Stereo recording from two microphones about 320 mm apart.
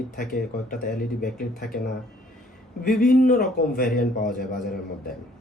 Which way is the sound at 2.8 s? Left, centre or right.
Left.